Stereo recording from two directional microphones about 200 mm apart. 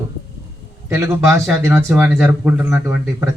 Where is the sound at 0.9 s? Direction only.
15° right (ahead or behind).